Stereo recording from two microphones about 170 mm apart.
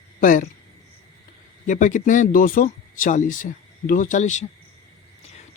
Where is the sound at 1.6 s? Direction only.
50° left (ahead or behind).